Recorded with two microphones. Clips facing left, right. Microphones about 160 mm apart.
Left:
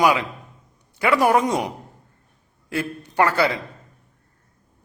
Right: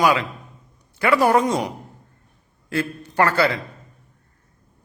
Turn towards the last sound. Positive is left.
turn(degrees=15)  # may be behind; listen again after turning